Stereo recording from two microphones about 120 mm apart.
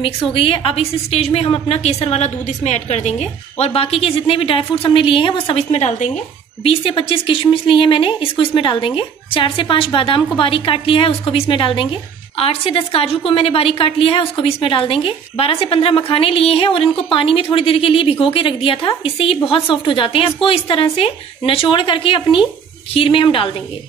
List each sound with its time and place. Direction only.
0.0 s a woman's voice: 45° left (ahead or behind); by 6.0 s 65° left (ahead or behind)
6.6 s a woman's voice: 50° left (ahead or behind)